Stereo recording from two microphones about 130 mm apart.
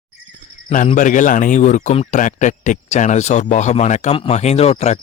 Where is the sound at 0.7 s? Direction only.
85° left.